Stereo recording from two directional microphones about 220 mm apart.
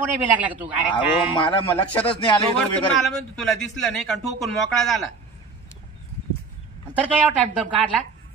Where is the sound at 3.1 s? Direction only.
5° left (ahead or behind).